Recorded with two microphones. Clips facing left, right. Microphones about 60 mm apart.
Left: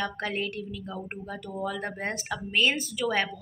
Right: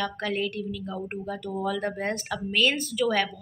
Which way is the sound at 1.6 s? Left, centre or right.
Left.